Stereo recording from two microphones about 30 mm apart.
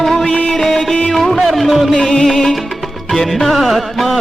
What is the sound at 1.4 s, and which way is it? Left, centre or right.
Music, centre.